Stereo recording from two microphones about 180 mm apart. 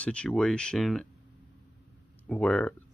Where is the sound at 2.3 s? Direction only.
5° left (ahead or behind).